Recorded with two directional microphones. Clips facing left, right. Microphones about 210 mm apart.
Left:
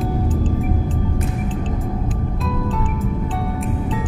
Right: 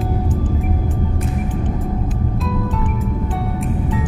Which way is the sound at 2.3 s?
Centre (ahead or behind).